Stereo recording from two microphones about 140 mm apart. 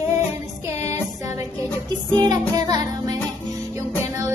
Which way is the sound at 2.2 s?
30° right (ahead or behind).